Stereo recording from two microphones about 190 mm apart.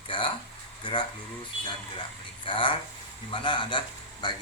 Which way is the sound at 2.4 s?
25° left (ahead or behind).